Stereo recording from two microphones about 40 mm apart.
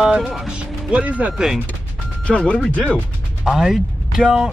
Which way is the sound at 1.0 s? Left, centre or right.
Right.